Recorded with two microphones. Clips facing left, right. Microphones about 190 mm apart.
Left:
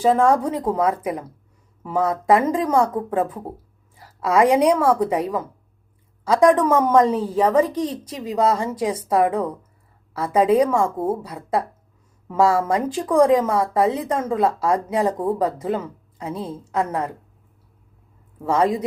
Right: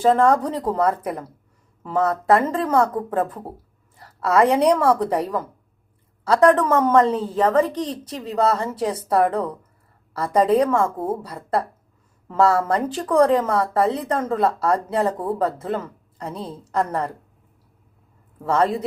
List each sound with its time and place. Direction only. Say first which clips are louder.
0.0 s a woman's voice: even; 10° left (ahead or behind)
18.3 s speech: left 1 dB; 10° left (ahead or behind)